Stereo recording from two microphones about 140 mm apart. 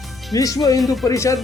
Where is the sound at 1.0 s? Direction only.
20° left (ahead or behind).